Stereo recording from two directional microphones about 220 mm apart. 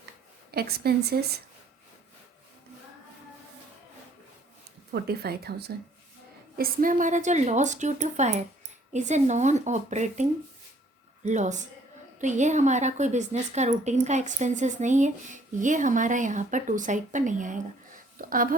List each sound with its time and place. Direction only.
0.5 s speech: 45° right (ahead or behind)
4.9 s a woman's voice: 45° right (ahead or behind)